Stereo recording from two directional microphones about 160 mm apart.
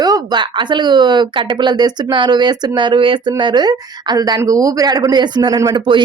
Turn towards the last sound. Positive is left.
turn(degrees=-30)  # may be behind; listen again after turning